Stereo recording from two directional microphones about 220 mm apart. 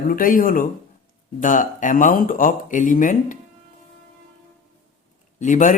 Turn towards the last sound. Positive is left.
turn(degrees=35)  # may be behind; listen again after turning